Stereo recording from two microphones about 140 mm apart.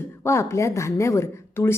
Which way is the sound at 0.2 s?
20° left (ahead or behind).